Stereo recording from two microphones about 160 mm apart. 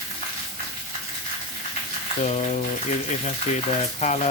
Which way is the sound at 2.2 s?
45° left (ahead or behind).